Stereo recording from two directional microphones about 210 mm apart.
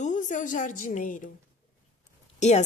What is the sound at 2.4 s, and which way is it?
Speech, 35° left (ahead or behind).